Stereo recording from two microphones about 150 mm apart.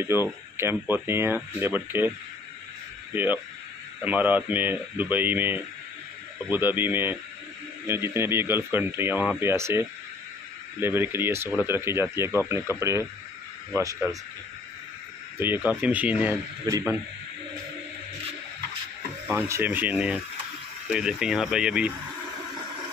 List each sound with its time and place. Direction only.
0.0 s speech: 15° right (ahead or behind)
13.7 s speech: 15° right (ahead or behind)
15.3 s speech: 15° right (ahead or behind)
16.6 s speech: 20° right (ahead or behind)
19.2 s speech: 15° right (ahead or behind)